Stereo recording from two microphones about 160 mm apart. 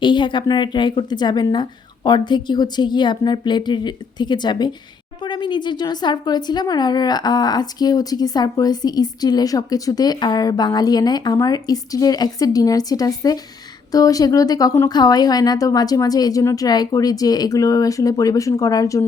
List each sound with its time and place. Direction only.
0.0 s a woman's voice: 30° left (ahead or behind)